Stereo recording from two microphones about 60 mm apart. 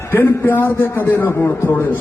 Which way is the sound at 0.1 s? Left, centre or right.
Left.